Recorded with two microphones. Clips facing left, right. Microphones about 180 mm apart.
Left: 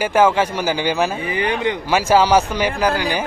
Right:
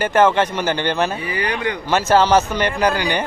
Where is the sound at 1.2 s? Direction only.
20° left (ahead or behind).